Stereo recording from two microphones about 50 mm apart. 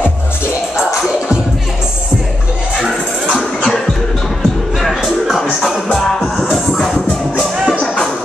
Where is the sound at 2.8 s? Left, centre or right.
Centre.